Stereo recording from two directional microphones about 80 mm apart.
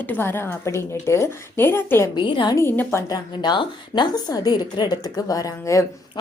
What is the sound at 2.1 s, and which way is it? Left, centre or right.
A woman's voice, left.